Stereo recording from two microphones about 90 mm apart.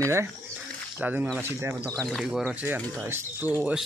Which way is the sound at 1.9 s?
5° left (ahead or behind).